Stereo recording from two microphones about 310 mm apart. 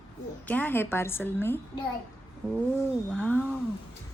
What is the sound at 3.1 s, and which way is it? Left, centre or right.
Speech, centre.